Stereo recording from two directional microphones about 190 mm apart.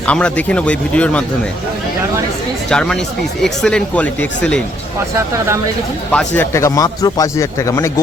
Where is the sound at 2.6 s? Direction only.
5° left (ahead or behind).